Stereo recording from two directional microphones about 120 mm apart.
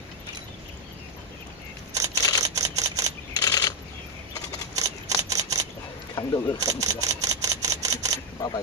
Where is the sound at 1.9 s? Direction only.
30° right (ahead or behind).